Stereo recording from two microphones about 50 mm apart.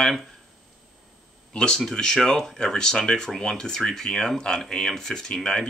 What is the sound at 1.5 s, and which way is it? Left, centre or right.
Speech, centre.